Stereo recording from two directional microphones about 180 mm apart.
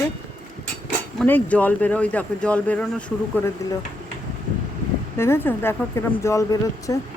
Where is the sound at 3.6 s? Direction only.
20° left (ahead or behind).